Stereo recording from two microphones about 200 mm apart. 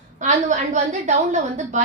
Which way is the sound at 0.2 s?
35° right (ahead or behind).